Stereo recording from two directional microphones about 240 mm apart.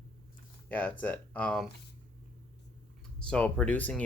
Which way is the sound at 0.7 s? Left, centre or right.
Centre.